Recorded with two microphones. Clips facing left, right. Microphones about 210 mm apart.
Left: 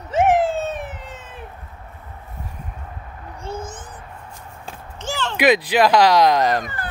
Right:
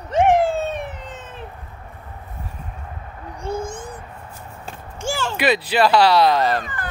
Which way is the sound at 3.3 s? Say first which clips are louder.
Right 4 dB; 15° right (ahead or behind).